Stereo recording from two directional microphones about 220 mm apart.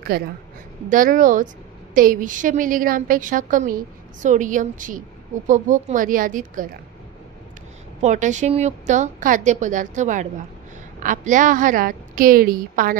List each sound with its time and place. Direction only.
0.1 s a woman's voice: 45° right (ahead or behind)
8.0 s a woman's voice: 35° right (ahead or behind)